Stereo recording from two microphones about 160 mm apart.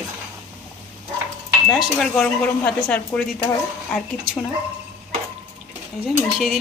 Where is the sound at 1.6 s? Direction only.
Centre (ahead or behind).